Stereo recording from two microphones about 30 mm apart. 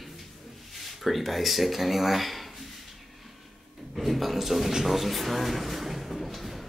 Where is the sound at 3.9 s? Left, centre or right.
Centre.